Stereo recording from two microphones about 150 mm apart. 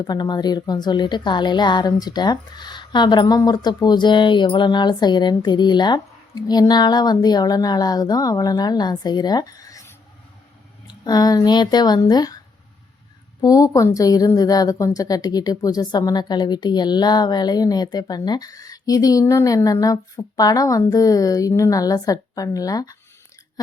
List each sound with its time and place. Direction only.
0.0 s a woman's voice: 30° left (ahead or behind)
13.4 s a woman's voice: 25° left (ahead or behind)